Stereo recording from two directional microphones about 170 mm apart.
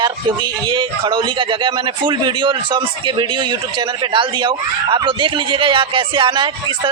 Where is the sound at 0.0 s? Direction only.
25° right (ahead or behind).